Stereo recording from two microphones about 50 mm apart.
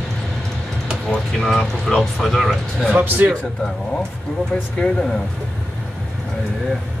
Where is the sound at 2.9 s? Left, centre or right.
Right.